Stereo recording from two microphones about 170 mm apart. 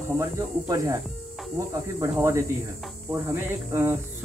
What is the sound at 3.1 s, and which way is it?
Speech, 15° right (ahead or behind).